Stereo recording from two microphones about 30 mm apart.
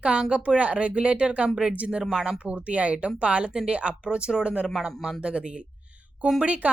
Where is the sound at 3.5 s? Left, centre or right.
Right.